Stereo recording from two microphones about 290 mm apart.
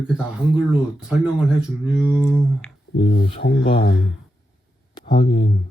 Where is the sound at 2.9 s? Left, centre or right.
Left.